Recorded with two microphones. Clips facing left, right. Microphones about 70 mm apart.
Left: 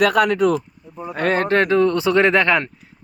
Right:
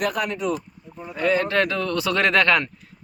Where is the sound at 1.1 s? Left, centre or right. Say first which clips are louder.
Left 3 dB; left.